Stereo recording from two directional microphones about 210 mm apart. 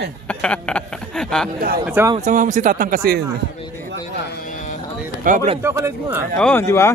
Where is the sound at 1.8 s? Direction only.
10° right (ahead or behind).